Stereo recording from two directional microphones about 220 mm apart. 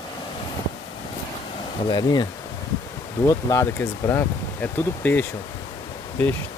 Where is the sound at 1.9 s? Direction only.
20° left (ahead or behind).